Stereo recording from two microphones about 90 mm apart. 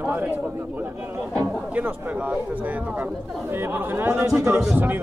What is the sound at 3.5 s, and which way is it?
Chatter, 25° right (ahead or behind).